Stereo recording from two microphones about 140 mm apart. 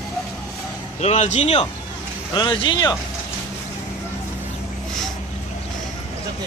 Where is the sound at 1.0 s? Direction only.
55° left (ahead or behind).